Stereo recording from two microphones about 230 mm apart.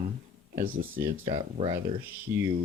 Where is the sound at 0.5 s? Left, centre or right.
Right.